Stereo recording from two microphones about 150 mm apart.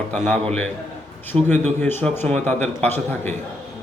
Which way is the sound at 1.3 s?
35° right (ahead or behind).